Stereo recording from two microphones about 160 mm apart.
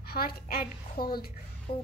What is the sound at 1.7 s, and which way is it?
Music, 40° left (ahead or behind).